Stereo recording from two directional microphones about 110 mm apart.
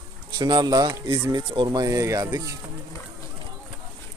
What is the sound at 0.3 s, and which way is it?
Speech, 40° right (ahead or behind).